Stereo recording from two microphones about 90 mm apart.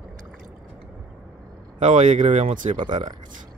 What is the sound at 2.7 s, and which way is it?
Speech, 65° right (ahead or behind).